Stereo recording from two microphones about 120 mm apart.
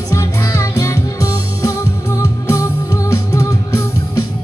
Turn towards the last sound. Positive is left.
turn(degrees=25)  # may be behind; listen again after turning